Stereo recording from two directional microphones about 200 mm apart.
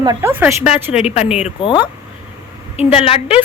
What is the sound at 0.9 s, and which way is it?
A woman's voice, 30° left (ahead or behind).